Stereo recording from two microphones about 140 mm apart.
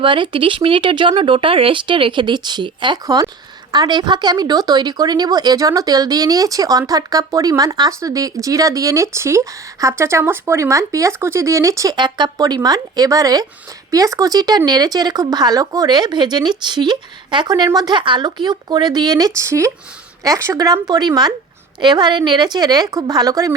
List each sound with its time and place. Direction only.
0.0 s speech: 35° right (ahead or behind)